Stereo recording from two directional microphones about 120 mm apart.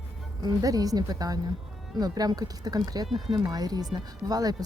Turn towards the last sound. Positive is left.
turn(degrees=-30)  # may be behind; listen again after turning